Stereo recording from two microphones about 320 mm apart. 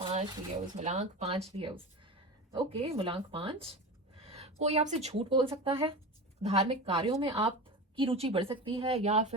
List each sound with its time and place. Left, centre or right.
0.0 s speech: centre
4.3 s a sound: centre
5.0 s speech: centre